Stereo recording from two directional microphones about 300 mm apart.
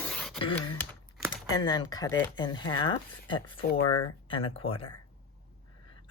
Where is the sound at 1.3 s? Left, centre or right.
Centre.